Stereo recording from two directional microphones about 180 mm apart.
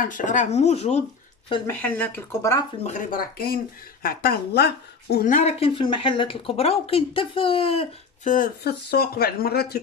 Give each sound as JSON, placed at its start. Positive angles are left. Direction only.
{"t": 0.0, "sound": "speech", "side_deg": 45}
{"t": 1.7, "sound": "speech", "side_deg": 10}
{"t": 2.8, "sound": "speech", "side_deg": 45}
{"t": 8.6, "sound": "speech", "side_deg": 60}